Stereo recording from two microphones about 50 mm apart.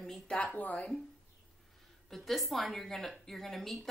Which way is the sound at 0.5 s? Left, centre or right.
Left.